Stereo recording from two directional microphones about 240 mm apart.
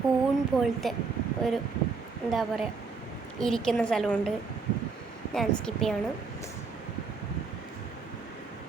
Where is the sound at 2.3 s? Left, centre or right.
Centre.